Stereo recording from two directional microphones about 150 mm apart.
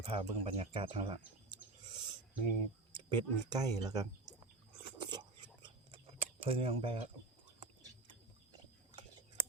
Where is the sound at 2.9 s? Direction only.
30° right (ahead or behind).